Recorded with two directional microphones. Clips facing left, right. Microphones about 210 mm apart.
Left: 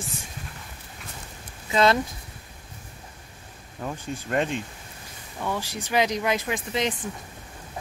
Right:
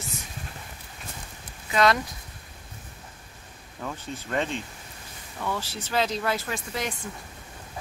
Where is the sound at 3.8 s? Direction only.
20° left (ahead or behind).